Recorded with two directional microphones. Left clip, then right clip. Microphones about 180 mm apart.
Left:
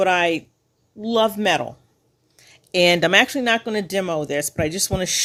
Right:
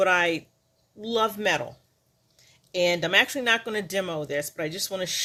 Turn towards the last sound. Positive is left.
turn(degrees=45)  # may be behind; listen again after turning